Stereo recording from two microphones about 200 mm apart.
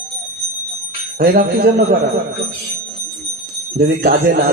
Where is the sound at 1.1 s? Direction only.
50° right (ahead or behind).